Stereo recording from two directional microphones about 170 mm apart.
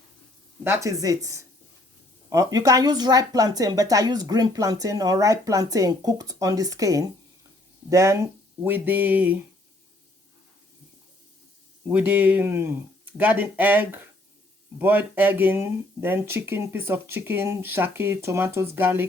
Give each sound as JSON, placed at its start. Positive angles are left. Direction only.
{"t": 0.6, "sound": "speech", "side_deg": -15}
{"t": 11.9, "sound": "speech", "side_deg": -10}